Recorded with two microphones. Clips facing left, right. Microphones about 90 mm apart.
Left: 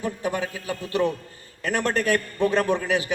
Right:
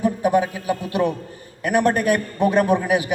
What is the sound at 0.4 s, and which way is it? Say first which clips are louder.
A man's voice: right 6 dB; 20° right (ahead or behind).